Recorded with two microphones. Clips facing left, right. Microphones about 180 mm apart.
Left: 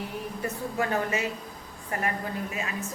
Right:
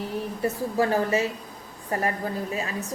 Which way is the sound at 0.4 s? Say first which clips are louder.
Right 6 dB; 35° right (ahead or behind).